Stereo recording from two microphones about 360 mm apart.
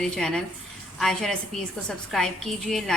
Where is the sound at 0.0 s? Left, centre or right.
Centre.